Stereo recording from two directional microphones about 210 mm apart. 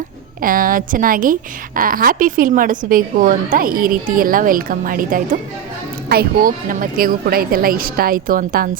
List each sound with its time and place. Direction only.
0.4 s a woman's voice: 40° right (ahead or behind)